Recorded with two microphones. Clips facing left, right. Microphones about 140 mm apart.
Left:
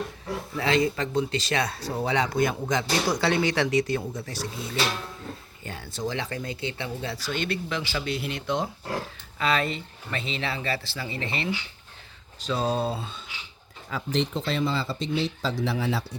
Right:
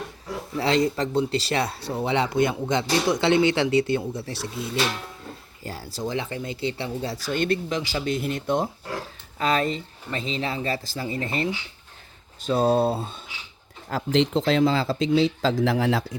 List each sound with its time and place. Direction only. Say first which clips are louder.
0.5 s speech: right 2 dB; 30° right (ahead or behind)
7.3 s speech: right 7 dB; 45° right (ahead or behind)
7.8 s speech: right 4 dB; 35° right (ahead or behind); by 13.2 s 50° right (ahead or behind)
13.9 s speech: right 6 dB; 90° right